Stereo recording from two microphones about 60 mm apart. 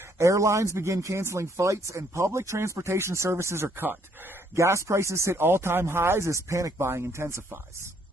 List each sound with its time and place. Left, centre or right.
0.2 s speech: right
4.6 s speech: right
5.4 s speech: right
6.9 s speech: right